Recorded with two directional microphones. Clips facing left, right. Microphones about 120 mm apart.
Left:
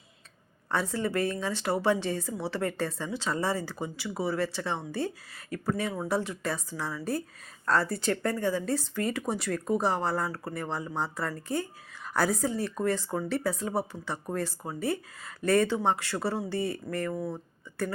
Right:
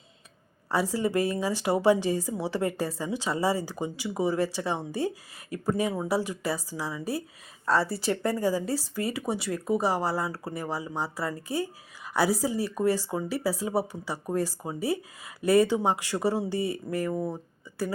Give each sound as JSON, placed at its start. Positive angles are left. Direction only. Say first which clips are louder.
{"t": 0.7, "sound": "speech", "louder": "right 3 dB", "side_deg": -10}